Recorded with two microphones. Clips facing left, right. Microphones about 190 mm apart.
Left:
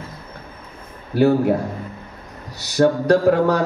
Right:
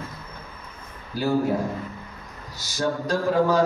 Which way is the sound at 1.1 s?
65° left (ahead or behind).